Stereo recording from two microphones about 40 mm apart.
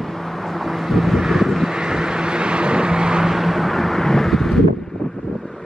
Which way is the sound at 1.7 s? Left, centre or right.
Centre.